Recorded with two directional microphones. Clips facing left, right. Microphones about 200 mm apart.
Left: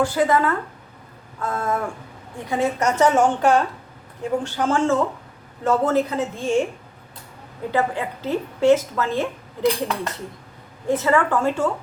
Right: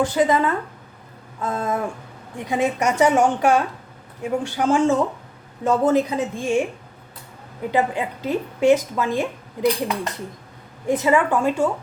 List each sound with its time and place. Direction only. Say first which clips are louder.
0.0 s a woman's voice: right 1 dB; 20° right (ahead or behind)
7.7 s a woman's voice: right 1 dB; 15° right (ahead or behind)
10.8 s a woman's voice: right 1 dB; 15° right (ahead or behind)